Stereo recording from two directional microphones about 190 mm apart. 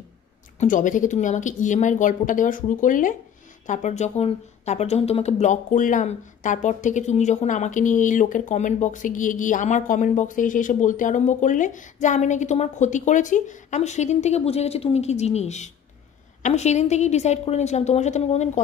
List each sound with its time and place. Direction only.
0.6 s speech: 40° left (ahead or behind)